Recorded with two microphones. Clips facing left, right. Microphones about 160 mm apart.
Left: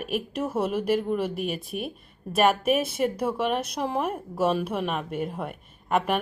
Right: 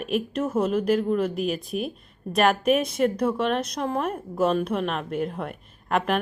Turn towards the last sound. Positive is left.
turn(degrees=5)  # may be behind; listen again after turning